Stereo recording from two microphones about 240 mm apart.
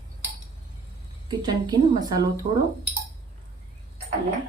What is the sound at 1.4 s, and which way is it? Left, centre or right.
Speech, centre.